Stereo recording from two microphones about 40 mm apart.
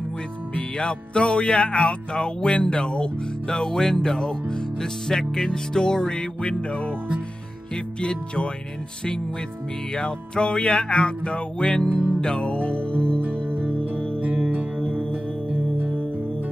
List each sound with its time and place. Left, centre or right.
0.6 s music: left
9.9 s music: left